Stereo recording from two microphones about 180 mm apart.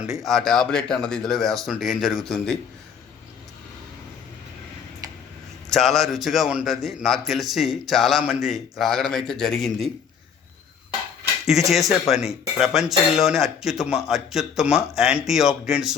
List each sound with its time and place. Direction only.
0.0 s a man's voice: centre (ahead or behind)
5.6 s a man's voice: centre (ahead or behind)
11.7 s a man's voice: centre (ahead or behind)